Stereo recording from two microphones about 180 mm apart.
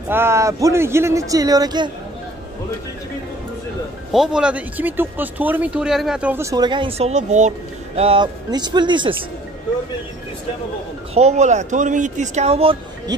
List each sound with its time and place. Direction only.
0.1 s speech: 15° right (ahead or behind)
4.1 s speech: 5° right (ahead or behind); by 9.1 s 25° right (ahead or behind)
11.1 s speech: 40° right (ahead or behind)